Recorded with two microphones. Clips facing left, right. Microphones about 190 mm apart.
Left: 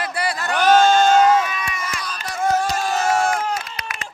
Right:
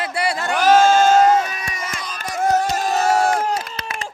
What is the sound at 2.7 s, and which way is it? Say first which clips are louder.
Crowd: right 2 dB; 40° right (ahead or behind).